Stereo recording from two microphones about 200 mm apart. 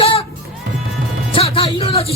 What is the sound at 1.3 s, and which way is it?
Speech, 30° left (ahead or behind).